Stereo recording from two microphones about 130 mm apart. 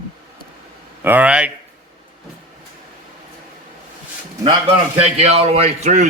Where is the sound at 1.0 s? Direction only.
10° right (ahead or behind).